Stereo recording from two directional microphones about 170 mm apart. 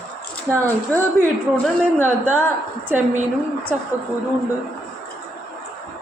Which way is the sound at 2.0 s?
10° right (ahead or behind).